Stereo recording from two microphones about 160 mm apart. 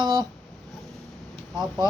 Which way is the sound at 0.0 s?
25° right (ahead or behind).